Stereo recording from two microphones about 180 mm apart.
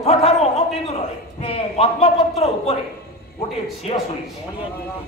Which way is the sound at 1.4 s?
35° left (ahead or behind).